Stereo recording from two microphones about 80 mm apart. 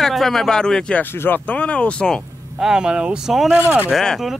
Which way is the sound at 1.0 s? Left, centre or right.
Left.